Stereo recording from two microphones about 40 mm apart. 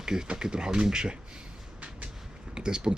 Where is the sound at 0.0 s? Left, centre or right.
Centre.